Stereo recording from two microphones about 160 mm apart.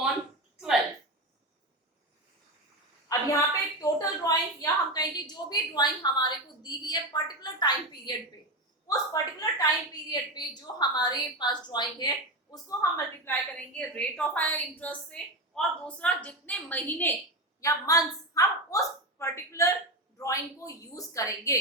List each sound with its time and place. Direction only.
3.1 s a sound: 25° left (ahead or behind)
3.8 s a woman's voice: 20° left (ahead or behind)
13.7 s a woman's voice: 5° left (ahead or behind)